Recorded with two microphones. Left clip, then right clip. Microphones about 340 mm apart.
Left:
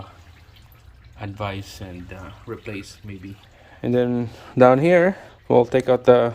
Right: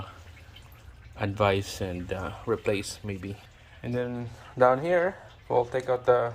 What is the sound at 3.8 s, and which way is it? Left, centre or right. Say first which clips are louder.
Speech: left 11 dB; left.